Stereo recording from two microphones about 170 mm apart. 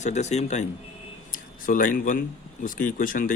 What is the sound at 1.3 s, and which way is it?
Speech, 55° left (ahead or behind).